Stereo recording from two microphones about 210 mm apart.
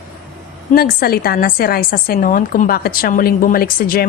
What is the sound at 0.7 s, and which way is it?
A woman's voice, 45° left (ahead or behind).